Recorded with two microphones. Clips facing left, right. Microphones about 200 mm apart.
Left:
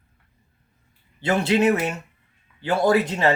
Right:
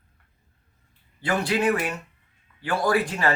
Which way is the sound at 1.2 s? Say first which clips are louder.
Left 4 dB; 25° left (ahead or behind).